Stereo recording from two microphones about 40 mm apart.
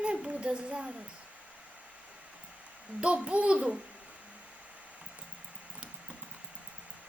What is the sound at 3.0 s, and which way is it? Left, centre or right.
Speech, right.